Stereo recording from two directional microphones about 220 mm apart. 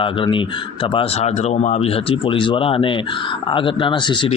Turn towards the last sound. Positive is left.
turn(degrees=20)  # may be behind; listen again after turning